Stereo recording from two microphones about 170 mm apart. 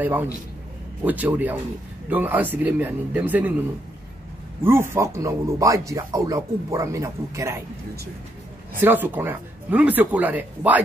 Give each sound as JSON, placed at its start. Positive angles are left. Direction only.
{"t": 0.0, "sound": "speech", "side_deg": -10}
{"t": 4.6, "sound": "speech", "side_deg": -15}
{"t": 8.7, "sound": "speech", "side_deg": -10}